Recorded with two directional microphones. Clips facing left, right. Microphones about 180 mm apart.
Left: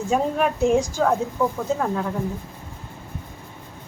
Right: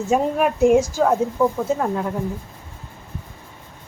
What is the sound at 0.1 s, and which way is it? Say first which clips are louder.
A woman's voice: right 2 dB; 5° right (ahead or behind).